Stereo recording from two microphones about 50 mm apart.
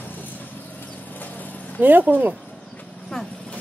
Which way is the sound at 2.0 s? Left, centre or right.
Right.